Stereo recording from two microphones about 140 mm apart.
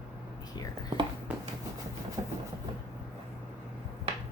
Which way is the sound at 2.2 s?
40° right (ahead or behind).